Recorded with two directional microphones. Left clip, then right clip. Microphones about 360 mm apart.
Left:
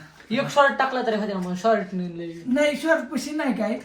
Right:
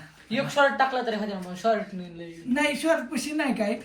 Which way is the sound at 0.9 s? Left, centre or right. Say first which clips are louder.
Left 4 dB; left.